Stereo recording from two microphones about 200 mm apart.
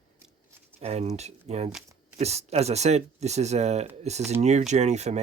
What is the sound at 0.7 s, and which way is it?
Speech, 30° right (ahead or behind).